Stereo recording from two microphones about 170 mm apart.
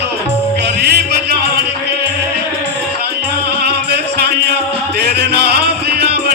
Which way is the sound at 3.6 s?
70° right (ahead or behind).